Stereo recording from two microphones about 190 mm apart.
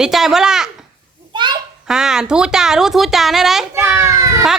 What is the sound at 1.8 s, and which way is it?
A woman's voice, 5° right (ahead or behind).